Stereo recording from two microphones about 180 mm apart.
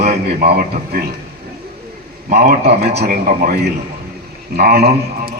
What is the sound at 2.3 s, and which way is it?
Speech, 60° right (ahead or behind).